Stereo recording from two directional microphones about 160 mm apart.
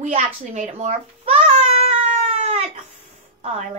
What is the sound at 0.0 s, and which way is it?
Speech, 50° right (ahead or behind).